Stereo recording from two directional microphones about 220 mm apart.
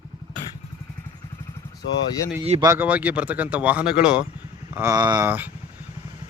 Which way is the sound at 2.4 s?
25° right (ahead or behind).